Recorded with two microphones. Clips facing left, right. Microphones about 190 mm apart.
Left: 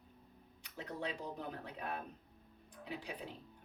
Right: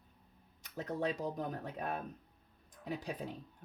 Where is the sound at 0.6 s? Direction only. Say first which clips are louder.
Right 6 dB; 40° right (ahead or behind).